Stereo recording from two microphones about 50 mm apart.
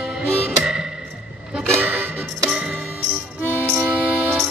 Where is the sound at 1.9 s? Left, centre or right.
Right.